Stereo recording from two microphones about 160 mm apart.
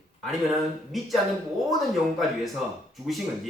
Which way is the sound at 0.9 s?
Centre (ahead or behind).